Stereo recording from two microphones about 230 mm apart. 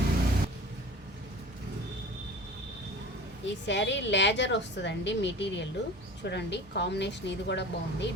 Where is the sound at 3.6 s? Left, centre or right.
Left.